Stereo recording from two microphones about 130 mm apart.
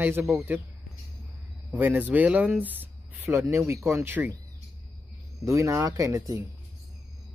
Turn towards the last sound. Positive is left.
turn(degrees=-20)  # may be behind; listen again after turning